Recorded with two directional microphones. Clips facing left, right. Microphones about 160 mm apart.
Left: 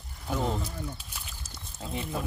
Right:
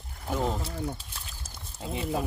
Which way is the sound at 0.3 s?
10° right (ahead or behind).